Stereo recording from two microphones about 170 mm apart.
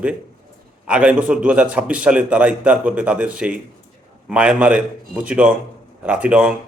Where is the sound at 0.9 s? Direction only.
5° right (ahead or behind).